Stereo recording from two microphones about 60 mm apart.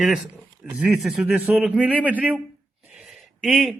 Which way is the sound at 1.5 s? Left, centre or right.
Right.